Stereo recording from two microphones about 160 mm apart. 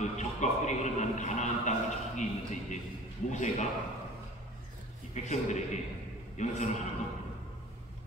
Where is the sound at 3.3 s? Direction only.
50° left (ahead or behind).